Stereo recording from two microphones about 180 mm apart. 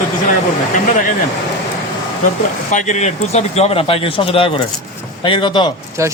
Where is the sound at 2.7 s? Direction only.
40° left (ahead or behind).